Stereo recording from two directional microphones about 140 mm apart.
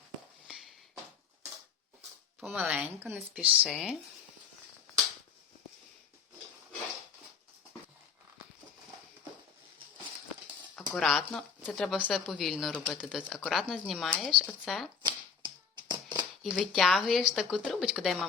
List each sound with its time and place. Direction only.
2.4 s speech: 10° right (ahead or behind)
10.9 s speech: centre (ahead or behind)
15.0 s a sound: 30° right (ahead or behind)
16.4 s speech: centre (ahead or behind)